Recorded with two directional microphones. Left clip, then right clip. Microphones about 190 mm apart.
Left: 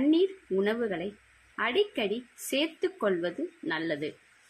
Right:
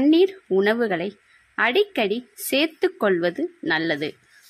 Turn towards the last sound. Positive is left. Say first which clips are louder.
# right 9 dB
turn(degrees=-55)  # may be behind; listen again after turning